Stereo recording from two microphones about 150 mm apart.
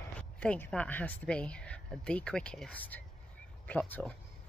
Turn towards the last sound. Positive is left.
turn(degrees=10)  # may be behind; listen again after turning